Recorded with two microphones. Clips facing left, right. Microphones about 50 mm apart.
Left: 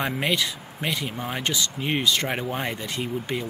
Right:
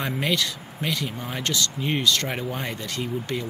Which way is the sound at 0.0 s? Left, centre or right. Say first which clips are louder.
Left 1 dB; centre.